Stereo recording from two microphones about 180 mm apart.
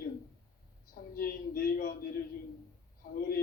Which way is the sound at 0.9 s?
55° left (ahead or behind).